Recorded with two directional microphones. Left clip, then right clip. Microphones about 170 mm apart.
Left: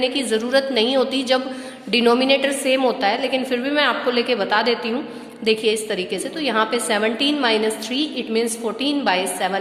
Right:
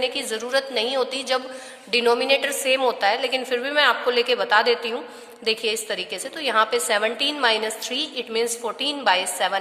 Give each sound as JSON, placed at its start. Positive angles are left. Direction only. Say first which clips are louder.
{"t": 0.0, "sound": "a woman's voice", "louder": "left 5 dB", "side_deg": -35}